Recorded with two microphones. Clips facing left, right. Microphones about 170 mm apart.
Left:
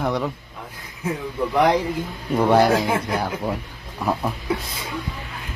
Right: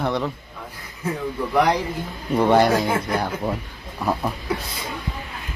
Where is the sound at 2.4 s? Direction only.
Centre (ahead or behind).